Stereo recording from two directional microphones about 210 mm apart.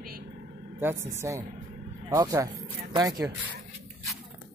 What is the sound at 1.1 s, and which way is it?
Speech, 15° right (ahead or behind).